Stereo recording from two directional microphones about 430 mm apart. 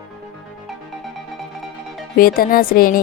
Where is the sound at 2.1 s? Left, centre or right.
Centre.